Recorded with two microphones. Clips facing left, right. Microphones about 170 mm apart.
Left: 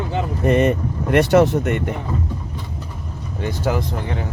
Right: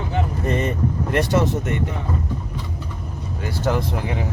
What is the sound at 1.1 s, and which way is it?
Speech, 65° left (ahead or behind).